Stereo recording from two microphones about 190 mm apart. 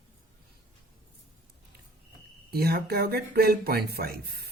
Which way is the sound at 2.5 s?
55° right (ahead or behind).